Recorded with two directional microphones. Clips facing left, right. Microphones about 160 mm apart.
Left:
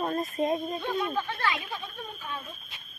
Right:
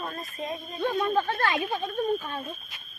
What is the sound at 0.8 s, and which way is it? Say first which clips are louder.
Speech: right 9 dB; 50° right (ahead or behind).